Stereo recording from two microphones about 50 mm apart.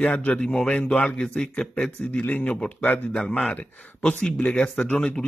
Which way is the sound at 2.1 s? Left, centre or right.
Left.